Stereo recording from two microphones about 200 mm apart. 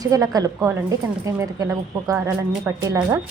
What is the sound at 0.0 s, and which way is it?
A woman's voice, 20° right (ahead or behind).